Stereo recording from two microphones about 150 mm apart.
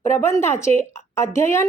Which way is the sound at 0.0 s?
20° left (ahead or behind).